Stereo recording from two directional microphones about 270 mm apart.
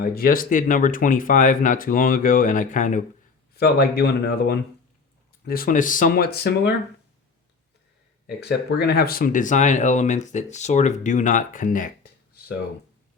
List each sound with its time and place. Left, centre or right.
0.0 s speech: left
8.4 s speech: left